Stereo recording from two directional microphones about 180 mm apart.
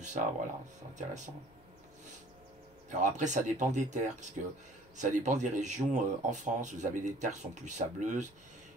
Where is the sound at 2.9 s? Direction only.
45° right (ahead or behind).